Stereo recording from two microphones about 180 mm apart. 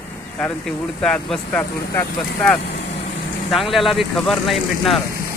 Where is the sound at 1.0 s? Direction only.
5° left (ahead or behind).